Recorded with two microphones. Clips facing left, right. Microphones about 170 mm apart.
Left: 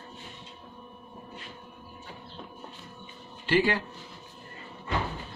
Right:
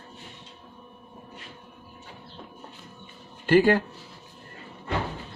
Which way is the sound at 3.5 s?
45° right (ahead or behind).